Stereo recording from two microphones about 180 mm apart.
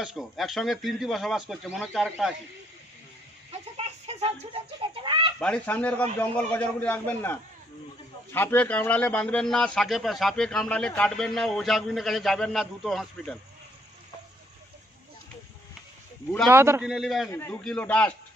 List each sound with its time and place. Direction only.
0.0 s a man's voice: centre (ahead or behind)
3.7 s chicken: 35° right (ahead or behind)
5.4 s a man's voice: 5° left (ahead or behind)
16.4 s a man's voice: 15° right (ahead or behind)
16.8 s a man's voice: centre (ahead or behind)
17.3 s a man's voice: 15° left (ahead or behind)